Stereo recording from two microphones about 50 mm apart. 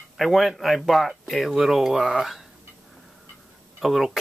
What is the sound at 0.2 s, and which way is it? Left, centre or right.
Speech, centre.